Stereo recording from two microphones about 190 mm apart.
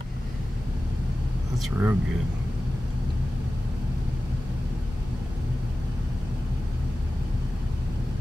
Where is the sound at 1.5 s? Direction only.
Centre (ahead or behind).